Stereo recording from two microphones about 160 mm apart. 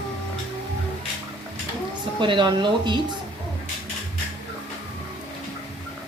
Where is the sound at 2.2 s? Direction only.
30° right (ahead or behind).